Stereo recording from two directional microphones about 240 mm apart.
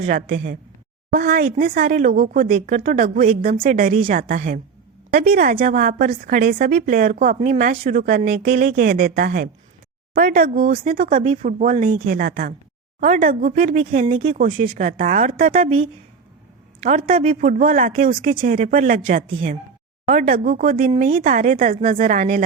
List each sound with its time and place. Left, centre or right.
0.0 s speech: right
17.1 s speech: right